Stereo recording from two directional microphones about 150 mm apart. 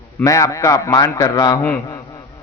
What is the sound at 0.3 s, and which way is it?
A man's voice, 20° left (ahead or behind).